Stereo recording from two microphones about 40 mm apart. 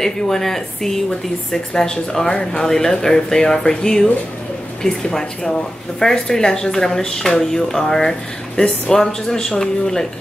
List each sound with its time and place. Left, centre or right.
0.0 s speech: centre